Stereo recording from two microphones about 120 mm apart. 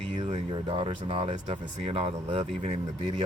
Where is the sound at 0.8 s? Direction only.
50° right (ahead or behind).